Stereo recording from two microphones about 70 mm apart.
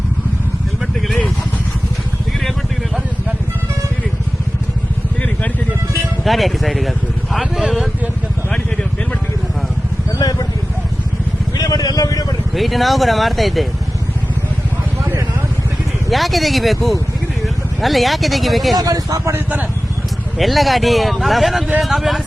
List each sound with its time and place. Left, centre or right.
6.2 s speech: centre
10.2 s a sound: left
11.5 s vehicle: left
12.5 s speech: centre
16.0 s speech: centre
18.8 s speech: right
19.3 s speech: right
20.4 s speech: centre